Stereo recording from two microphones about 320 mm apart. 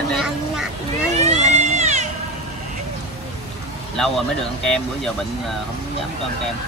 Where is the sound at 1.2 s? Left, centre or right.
Right.